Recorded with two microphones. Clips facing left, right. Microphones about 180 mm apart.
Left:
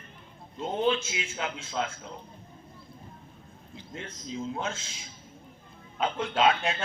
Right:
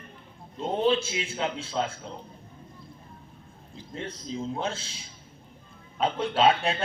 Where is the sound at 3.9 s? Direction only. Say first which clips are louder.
Right 3 dB; 35° right (ahead or behind).